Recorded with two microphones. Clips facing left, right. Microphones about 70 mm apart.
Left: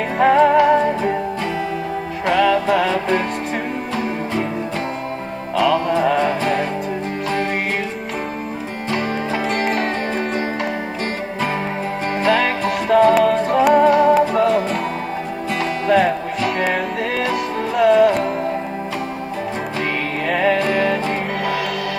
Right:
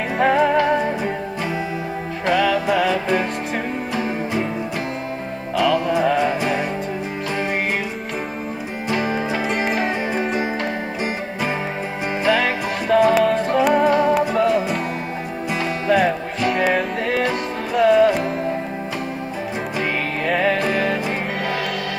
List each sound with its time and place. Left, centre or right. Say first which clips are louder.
0.2 s music: left 4 dB; centre
2.3 s music: left 3 dB; centre
3.9 s music: even; centre
5.6 s music: left 1 dB; centre
8.9 s music: even; centre
9.5 s music: left 2 dB; centre
12.2 s music: left 2 dB; centre
13.1 s music: left 2 dB; centre
15.9 s music: left 2 dB; centre
20.2 s music: left 2 dB; centre